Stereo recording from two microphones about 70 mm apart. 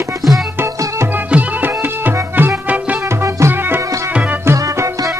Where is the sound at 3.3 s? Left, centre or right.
Right.